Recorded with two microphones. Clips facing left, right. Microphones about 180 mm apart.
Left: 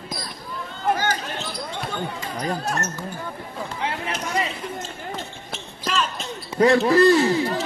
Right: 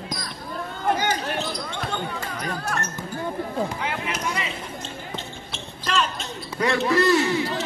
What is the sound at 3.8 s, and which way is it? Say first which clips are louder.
Chop: left 1 dB; 30° left (ahead or behind).